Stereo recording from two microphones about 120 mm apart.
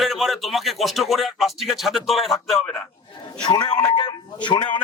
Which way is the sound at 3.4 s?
35° left (ahead or behind).